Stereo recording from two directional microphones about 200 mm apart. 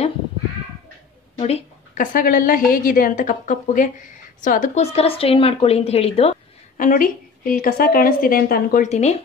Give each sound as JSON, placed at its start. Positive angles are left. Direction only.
{"t": 1.4, "sound": "a sound", "side_deg": 30}
{"t": 2.1, "sound": "a woman's voice", "side_deg": 45}
{"t": 6.8, "sound": "a woman's voice", "side_deg": 45}